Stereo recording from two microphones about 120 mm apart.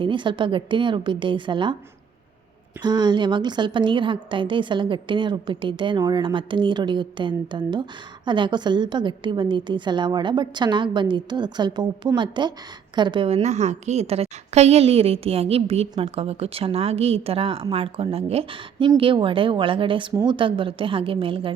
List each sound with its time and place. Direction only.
0.0 s a woman's voice: 45° right (ahead or behind)
2.8 s a woman's voice: 35° right (ahead or behind)